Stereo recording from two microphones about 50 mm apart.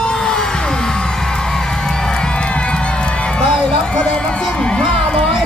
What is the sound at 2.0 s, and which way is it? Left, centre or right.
Crowd, centre.